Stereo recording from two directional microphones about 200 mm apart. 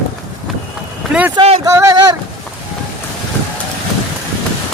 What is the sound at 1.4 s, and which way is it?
Speech, 30° right (ahead or behind).